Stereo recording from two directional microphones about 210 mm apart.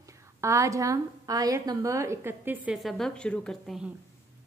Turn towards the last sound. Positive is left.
turn(degrees=5)  # may be behind; listen again after turning